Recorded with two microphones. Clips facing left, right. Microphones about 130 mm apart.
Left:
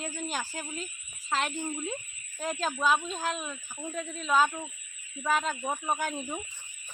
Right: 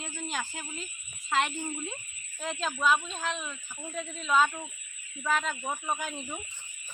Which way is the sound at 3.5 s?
10° left (ahead or behind).